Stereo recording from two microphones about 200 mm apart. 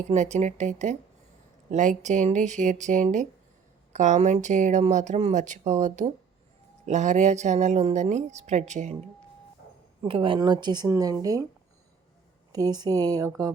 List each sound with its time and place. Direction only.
0.1 s speech: 35° right (ahead or behind)
10.0 s a woman's voice: 25° right (ahead or behind)
12.5 s a woman's voice: 20° right (ahead or behind)